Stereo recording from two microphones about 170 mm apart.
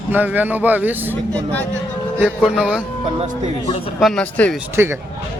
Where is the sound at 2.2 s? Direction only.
5° right (ahead or behind).